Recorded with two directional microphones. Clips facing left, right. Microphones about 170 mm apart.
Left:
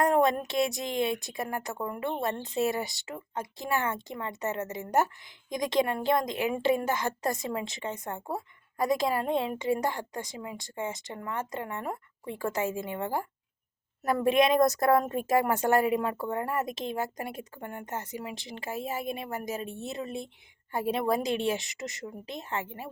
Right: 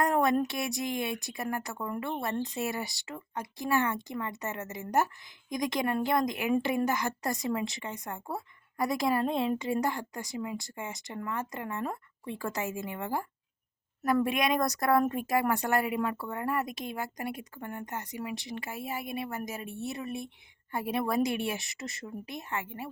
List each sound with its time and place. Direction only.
0.0 s a woman's voice: 20° left (ahead or behind)